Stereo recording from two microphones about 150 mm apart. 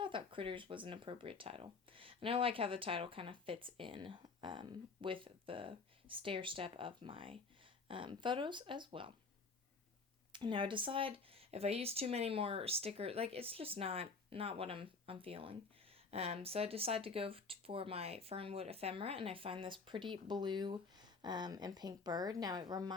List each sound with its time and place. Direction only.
0.0 s speech: 35° right (ahead or behind)
10.3 s speech: 35° right (ahead or behind)